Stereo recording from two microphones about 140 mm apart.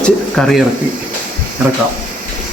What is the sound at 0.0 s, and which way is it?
Speech, 5° left (ahead or behind).